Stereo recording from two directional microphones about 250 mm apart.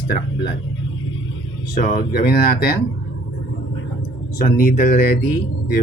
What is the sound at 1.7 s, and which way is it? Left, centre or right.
Speech, left.